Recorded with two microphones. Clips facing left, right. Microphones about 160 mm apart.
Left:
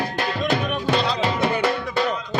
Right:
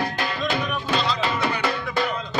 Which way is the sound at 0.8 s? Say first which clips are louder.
Left 3 dB; 70° left (ahead or behind).